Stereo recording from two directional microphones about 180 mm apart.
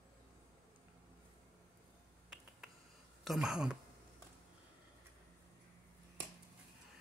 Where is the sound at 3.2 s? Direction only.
Centre (ahead or behind).